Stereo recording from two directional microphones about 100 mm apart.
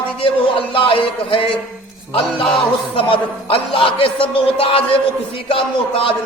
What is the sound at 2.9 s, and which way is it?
A man's voice, 60° left (ahead or behind).